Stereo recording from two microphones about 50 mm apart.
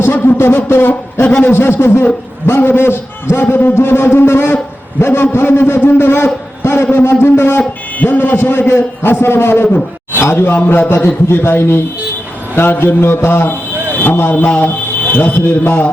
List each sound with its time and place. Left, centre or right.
0.0 s a man's voice: left
7.9 s a man's voice: left
11.0 s a man's voice: left